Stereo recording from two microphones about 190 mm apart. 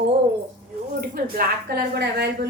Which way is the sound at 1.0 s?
50° right (ahead or behind).